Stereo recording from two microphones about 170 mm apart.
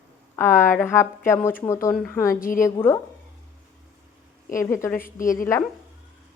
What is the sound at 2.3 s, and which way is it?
Speech, 55° left (ahead or behind).